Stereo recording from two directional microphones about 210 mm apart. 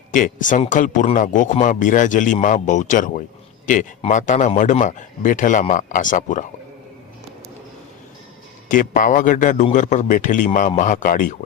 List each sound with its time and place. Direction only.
0.1 s a man's voice: 40° left (ahead or behind)
8.7 s a man's voice: 40° left (ahead or behind)